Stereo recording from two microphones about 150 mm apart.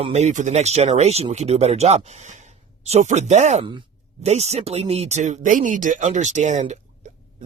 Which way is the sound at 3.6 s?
35° right (ahead or behind).